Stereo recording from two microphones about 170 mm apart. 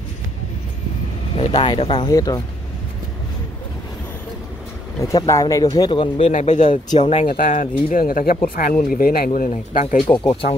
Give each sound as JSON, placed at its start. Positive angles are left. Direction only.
{"t": 1.3, "sound": "speech", "side_deg": 25}
{"t": 5.0, "sound": "speech", "side_deg": 20}
{"t": 6.1, "sound": "speech", "side_deg": 45}
{"t": 7.0, "sound": "speech", "side_deg": 35}
{"t": 7.2, "sound": "speech", "side_deg": 50}
{"t": 9.5, "sound": "speech", "side_deg": 40}